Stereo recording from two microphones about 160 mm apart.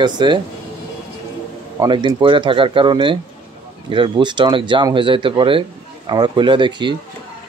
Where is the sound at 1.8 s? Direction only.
30° right (ahead or behind).